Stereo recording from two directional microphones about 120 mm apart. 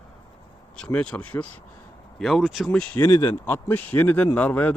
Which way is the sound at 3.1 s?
45° left (ahead or behind).